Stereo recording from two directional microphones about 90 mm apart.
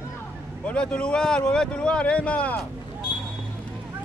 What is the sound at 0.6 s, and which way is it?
Speech, 15° left (ahead or behind).